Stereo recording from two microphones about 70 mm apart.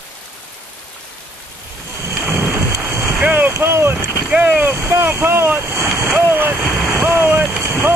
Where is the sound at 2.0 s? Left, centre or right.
Right.